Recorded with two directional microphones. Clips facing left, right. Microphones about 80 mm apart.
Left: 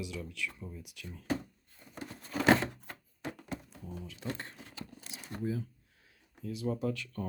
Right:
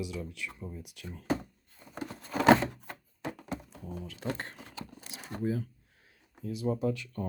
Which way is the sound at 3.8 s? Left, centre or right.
Right.